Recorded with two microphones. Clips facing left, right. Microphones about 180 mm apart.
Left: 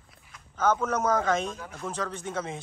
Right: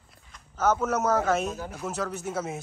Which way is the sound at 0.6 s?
10° right (ahead or behind).